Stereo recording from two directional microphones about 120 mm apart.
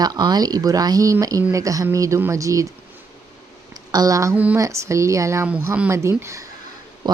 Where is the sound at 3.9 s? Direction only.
30° right (ahead or behind).